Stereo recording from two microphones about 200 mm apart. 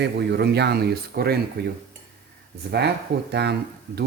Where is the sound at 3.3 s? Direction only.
55° right (ahead or behind).